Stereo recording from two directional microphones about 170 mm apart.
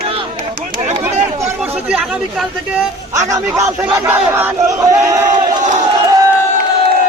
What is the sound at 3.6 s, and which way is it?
Speech, 15° right (ahead or behind).